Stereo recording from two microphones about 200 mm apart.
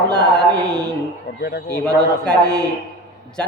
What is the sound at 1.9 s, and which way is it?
Speech, 5° left (ahead or behind).